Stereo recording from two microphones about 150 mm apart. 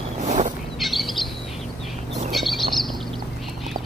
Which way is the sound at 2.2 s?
Centre (ahead or behind).